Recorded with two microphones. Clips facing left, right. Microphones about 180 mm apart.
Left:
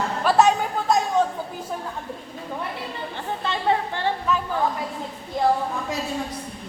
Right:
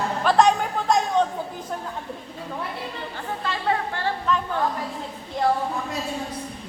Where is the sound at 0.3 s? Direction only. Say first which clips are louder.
Even; 5° left (ahead or behind).